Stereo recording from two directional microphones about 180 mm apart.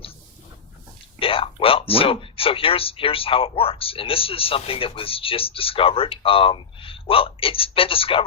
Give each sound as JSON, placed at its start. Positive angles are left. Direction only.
{"t": 1.2, "sound": "speech", "side_deg": 30}